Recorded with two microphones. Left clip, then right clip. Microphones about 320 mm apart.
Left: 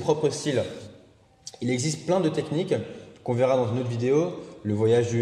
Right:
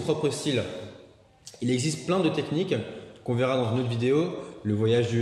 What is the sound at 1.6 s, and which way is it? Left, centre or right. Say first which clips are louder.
A man's voice: even; centre.